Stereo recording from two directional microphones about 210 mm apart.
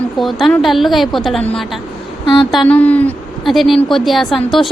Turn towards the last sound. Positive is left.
turn(degrees=0)  # may be behind; listen again after turning